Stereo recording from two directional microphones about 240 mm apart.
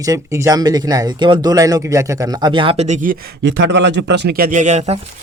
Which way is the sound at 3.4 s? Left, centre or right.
Right.